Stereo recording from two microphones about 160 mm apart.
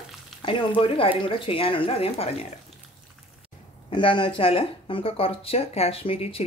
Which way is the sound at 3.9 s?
30° left (ahead or behind).